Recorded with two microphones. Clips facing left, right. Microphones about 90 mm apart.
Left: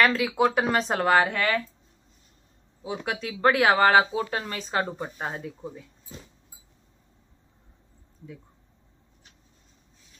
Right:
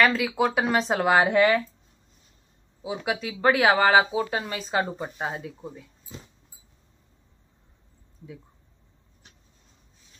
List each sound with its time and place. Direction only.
0.0 s speech: centre (ahead or behind)
1.1 s speech: 15° right (ahead or behind)
3.0 s speech: 5° right (ahead or behind)